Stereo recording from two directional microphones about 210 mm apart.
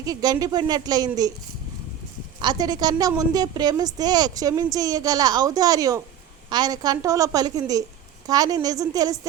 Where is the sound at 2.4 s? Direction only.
20° right (ahead or behind).